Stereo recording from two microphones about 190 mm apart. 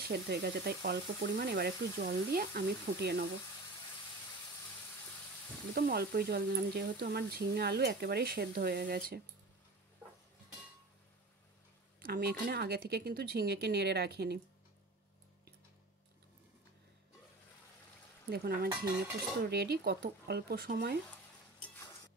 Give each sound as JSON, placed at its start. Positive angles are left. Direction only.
{"t": 0.1, "sound": "speech", "side_deg": -60}
{"t": 5.8, "sound": "speech", "side_deg": -55}
{"t": 12.0, "sound": "speech", "side_deg": -55}
{"t": 18.3, "sound": "speech", "side_deg": -55}